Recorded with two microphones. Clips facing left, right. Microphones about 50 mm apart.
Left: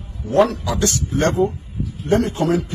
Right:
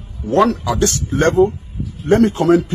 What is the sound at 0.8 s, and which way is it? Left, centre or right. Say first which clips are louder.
Speech: right 3 dB; right.